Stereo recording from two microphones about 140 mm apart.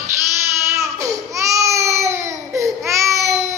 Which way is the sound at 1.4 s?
20° right (ahead or behind).